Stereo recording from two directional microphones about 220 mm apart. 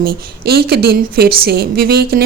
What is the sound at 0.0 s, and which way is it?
A woman's voice, 45° right (ahead or behind).